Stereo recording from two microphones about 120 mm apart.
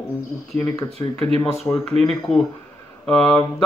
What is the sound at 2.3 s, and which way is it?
Speech, 65° left (ahead or behind).